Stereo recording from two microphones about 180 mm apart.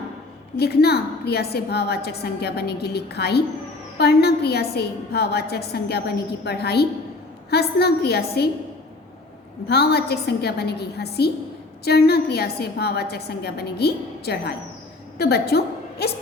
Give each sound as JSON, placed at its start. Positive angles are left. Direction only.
{"t": 0.5, "sound": "a woman's voice", "side_deg": 60}
{"t": 9.6, "sound": "a woman's voice", "side_deg": 65}